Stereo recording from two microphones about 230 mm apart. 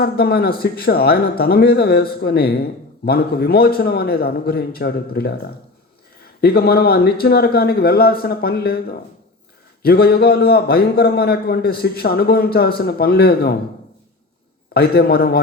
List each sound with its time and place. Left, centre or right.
0.0 s a man's voice: left
14.7 s a man's voice: left